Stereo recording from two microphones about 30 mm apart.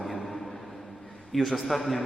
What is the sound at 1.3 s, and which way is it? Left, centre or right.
Speech, centre.